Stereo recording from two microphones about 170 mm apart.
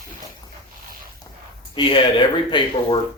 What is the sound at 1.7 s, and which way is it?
Speech, 30° left (ahead or behind).